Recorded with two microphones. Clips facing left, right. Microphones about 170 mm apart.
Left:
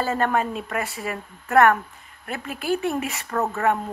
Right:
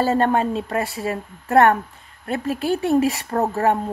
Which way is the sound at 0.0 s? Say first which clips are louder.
Right 4 dB; 30° right (ahead or behind).